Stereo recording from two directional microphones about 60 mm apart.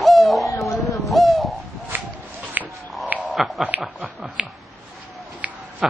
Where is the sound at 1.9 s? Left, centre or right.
Right.